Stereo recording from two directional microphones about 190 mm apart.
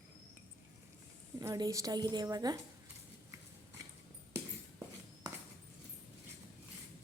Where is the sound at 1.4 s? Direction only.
20° right (ahead or behind).